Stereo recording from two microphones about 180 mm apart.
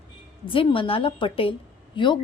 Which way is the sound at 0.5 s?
30° left (ahead or behind).